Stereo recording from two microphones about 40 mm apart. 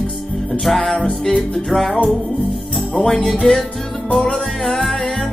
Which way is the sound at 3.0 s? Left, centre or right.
Centre.